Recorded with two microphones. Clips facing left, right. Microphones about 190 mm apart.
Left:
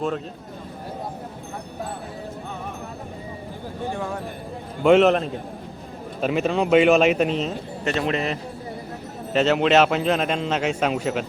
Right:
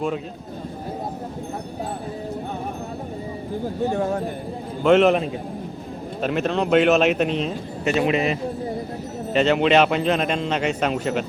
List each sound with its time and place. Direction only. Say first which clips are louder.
3.8 s speech: right 5 dB; 45° right (ahead or behind)
4.8 s a man's voice: even; centre (ahead or behind)
7.9 s a man's voice: right 4 dB; 10° right (ahead or behind)